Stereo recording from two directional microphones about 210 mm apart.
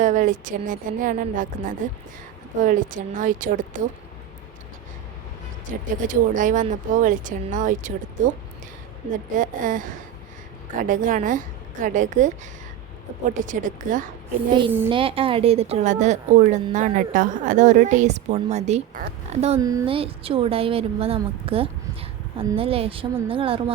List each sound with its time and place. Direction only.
0.0 s speech: 35° right (ahead or behind)
6.0 s speech: 40° right (ahead or behind)
9.3 s speech: 40° right (ahead or behind)
13.3 s speech: 35° right (ahead or behind)
14.8 s speech: 25° right (ahead or behind)
19.5 s speech: 15° right (ahead or behind)